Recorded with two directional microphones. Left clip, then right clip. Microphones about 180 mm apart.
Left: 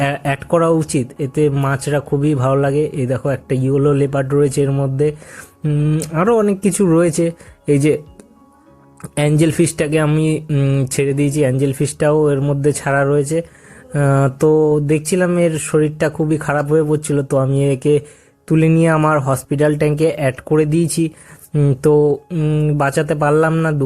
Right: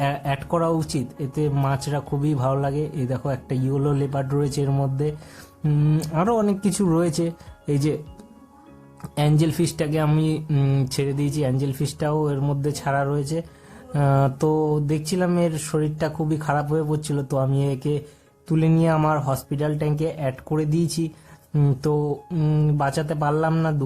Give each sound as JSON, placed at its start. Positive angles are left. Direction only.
{"t": 0.0, "sound": "speech", "side_deg": 20}
{"t": 5.6, "sound": "speech", "side_deg": 5}
{"t": 6.0, "sound": "speech", "side_deg": 15}
{"t": 9.1, "sound": "a sound", "side_deg": 20}
{"t": 10.1, "sound": "speech", "side_deg": 20}
{"t": 10.6, "sound": "speech", "side_deg": 10}
{"t": 11.0, "sound": "a sound", "side_deg": 20}
{"t": 22.3, "sound": "speech", "side_deg": 10}
{"t": 22.8, "sound": "a sound", "side_deg": 20}